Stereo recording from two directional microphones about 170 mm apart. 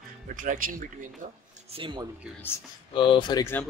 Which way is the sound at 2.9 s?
30° left (ahead or behind).